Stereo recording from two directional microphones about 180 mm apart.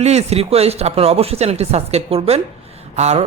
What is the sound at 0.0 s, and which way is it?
A man's voice, 35° right (ahead or behind).